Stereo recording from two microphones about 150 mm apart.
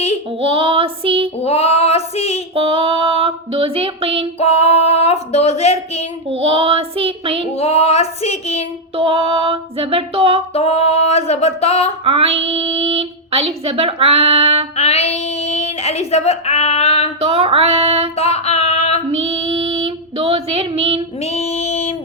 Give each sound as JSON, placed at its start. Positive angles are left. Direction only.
{"t": 0.3, "sound": "child singing", "side_deg": -40}
{"t": 1.4, "sound": "female singing", "side_deg": 45}
{"t": 2.6, "sound": "a sound", "side_deg": -40}
{"t": 4.4, "sound": "a sound", "side_deg": 45}
{"t": 6.2, "sound": "child singing", "side_deg": -40}
{"t": 7.5, "sound": "child singing", "side_deg": 45}
{"t": 9.0, "sound": "a sound", "side_deg": -40}
{"t": 10.5, "sound": "music", "side_deg": 40}
{"t": 12.0, "sound": "speech", "side_deg": -40}
{"t": 14.8, "sound": "speech", "side_deg": 45}
{"t": 17.2, "sound": "speech", "side_deg": -40}
{"t": 18.2, "sound": "female singing", "side_deg": 45}
{"t": 19.1, "sound": "female singing", "side_deg": -40}
{"t": 21.2, "sound": "a sound", "side_deg": 45}